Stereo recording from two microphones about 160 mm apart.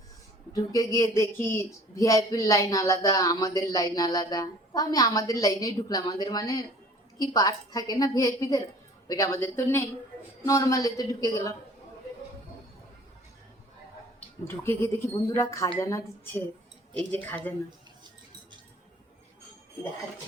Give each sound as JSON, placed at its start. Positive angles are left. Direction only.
{"t": 0.5, "sound": "speech", "side_deg": 20}
{"t": 14.4, "sound": "speech", "side_deg": 15}